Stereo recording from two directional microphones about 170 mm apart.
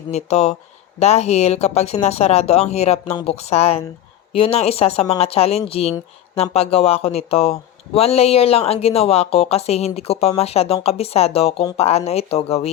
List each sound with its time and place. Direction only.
0.1 s speech: 40° left (ahead or behind)